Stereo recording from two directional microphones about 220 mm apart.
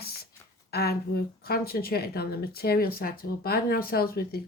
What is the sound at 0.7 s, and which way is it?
A woman's voice, 45° left (ahead or behind).